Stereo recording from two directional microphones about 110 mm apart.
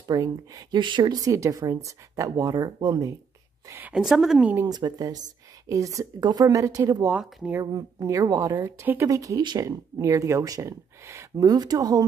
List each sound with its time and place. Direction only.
0.1 s speech: 35° right (ahead or behind)
3.9 s a woman's voice: 5° right (ahead or behind)
4.6 s a woman's voice: 40° right (ahead or behind)